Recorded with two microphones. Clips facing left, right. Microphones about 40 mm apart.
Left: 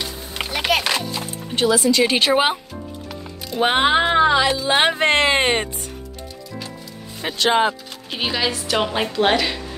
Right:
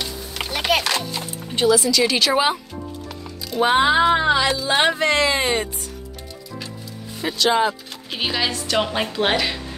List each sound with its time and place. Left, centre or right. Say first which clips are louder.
0.5 s music: even; centre
1.2 s speech: right 3 dB; centre
1.8 s speech: left 2 dB; left
3.6 s speech: right 1 dB; left
4.3 s speech: left 1 dB; centre
5.0 s speech: left 2 dB; left
7.3 s speech: left 1 dB; left
8.1 s a woman's voice: left 1 dB; centre